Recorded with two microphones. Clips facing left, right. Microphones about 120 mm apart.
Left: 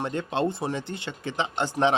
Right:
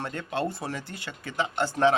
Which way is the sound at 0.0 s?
25° left (ahead or behind).